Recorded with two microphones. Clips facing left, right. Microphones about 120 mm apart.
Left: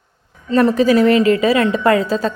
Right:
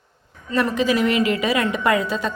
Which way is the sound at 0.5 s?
35° left (ahead or behind).